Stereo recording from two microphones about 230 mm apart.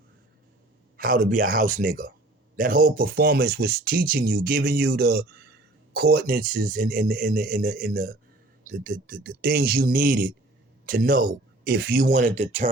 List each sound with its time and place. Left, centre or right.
0.9 s speech: right